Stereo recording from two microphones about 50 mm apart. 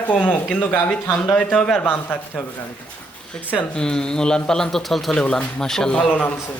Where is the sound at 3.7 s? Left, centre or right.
Centre.